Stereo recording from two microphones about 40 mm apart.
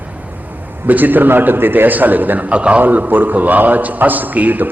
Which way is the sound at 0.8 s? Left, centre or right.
Right.